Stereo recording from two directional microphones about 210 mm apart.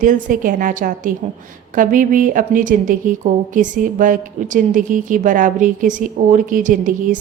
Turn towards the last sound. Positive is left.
turn(degrees=-40)  # may be behind; listen again after turning